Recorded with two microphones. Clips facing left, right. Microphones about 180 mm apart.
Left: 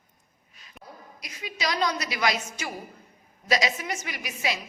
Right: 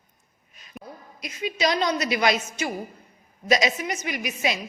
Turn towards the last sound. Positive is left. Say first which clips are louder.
# right 4 dB
turn(degrees=-20)  # may be behind; listen again after turning